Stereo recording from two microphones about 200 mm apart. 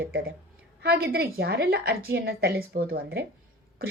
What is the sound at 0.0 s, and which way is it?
A woman's voice, 50° right (ahead or behind).